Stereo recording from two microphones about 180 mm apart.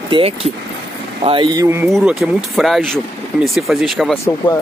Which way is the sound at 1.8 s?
Centre (ahead or behind).